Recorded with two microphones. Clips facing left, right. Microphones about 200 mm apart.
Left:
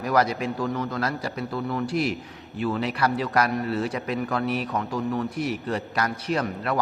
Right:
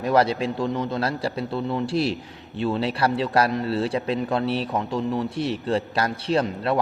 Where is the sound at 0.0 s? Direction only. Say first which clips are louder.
Right 3 dB; 30° right (ahead or behind).